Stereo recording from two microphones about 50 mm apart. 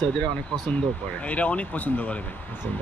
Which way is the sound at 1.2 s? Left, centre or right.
Left.